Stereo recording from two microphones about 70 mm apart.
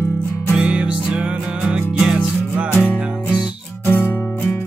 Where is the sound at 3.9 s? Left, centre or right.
Left.